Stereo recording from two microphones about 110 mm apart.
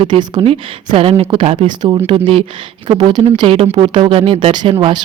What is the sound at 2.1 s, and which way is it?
Speech, 60° right (ahead or behind).